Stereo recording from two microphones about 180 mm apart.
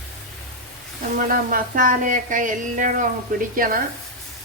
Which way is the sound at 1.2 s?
50° right (ahead or behind).